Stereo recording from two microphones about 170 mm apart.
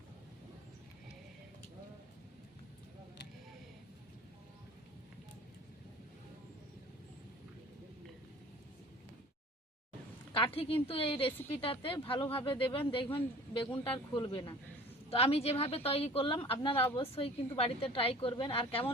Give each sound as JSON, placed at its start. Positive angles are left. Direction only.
{"t": 10.3, "sound": "a woman's voice", "side_deg": 35}
{"t": 11.3, "sound": "a woman's voice", "side_deg": 10}
{"t": 11.5, "sound": "a woman's voice", "side_deg": 35}